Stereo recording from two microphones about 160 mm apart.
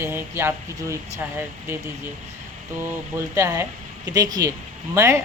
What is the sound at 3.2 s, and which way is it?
Speech, 15° right (ahead or behind).